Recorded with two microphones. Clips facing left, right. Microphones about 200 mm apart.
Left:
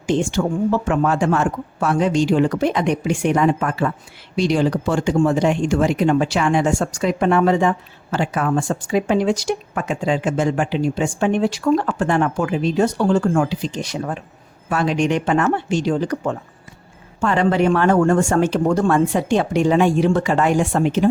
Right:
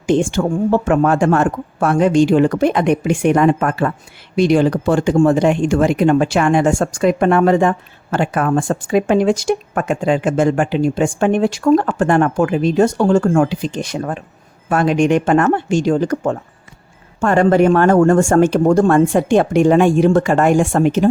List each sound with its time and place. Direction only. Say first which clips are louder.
0.1 s speech: right 4 dB; 55° right (ahead or behind)